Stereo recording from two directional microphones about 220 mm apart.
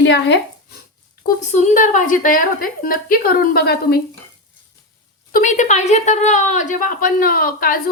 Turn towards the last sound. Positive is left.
turn(degrees=40)  # may be behind; listen again after turning